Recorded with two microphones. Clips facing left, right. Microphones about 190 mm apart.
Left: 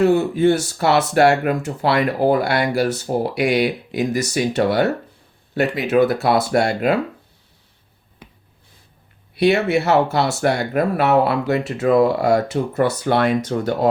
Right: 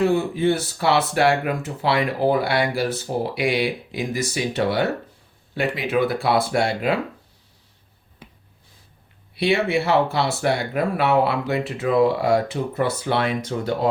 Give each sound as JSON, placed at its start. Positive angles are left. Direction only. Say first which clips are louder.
{"t": 0.1, "sound": "speech", "louder": "left 4 dB", "side_deg": 45}
{"t": 9.3, "sound": "speech", "louder": "left 4 dB", "side_deg": 45}